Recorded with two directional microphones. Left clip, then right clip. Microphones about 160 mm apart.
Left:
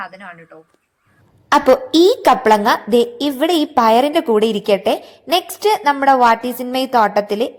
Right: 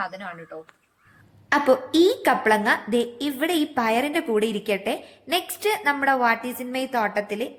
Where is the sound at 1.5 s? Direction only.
35° left (ahead or behind).